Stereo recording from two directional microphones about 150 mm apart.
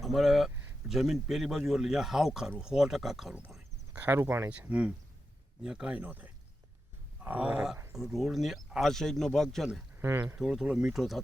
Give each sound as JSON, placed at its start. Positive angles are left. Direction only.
{"t": 0.0, "sound": "speech", "side_deg": 0}
{"t": 3.9, "sound": "speech", "side_deg": -15}
{"t": 10.0, "sound": "speech", "side_deg": -15}
{"t": 10.3, "sound": "speech", "side_deg": -5}